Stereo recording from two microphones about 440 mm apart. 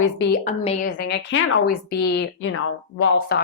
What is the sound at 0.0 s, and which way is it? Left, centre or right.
A woman's voice, centre.